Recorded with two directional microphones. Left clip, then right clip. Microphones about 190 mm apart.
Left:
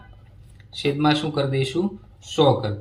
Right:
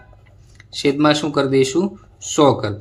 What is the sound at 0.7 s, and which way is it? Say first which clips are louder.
Speech: right 5 dB; 45° right (ahead or behind).